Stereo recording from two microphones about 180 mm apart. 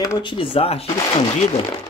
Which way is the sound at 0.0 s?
25° left (ahead or behind).